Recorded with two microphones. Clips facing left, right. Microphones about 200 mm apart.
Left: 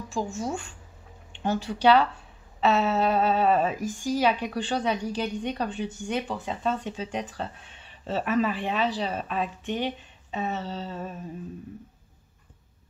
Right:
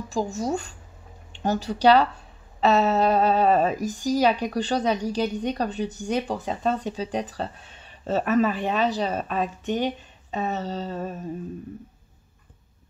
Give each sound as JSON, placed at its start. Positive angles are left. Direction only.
{"t": 0.1, "sound": "speech", "side_deg": -40}